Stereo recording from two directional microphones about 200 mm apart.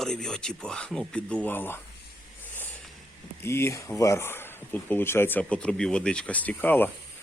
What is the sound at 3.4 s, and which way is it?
Speech, 15° left (ahead or behind).